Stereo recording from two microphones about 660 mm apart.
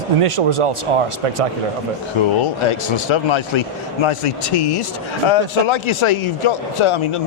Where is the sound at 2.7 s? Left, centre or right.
Left.